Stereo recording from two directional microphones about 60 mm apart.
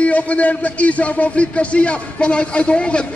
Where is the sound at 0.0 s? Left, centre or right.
Left.